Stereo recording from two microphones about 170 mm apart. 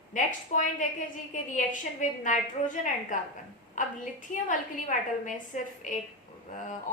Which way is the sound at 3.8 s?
50° left (ahead or behind).